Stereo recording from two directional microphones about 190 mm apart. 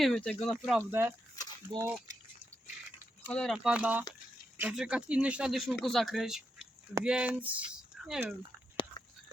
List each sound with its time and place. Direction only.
0.0 s speech: 5° left (ahead or behind)
0.6 s speech: 5° right (ahead or behind)
3.2 s speech: 5° left (ahead or behind)
8.7 s a sound: 25° left (ahead or behind)